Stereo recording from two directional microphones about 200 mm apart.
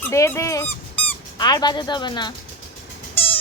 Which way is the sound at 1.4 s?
20° left (ahead or behind).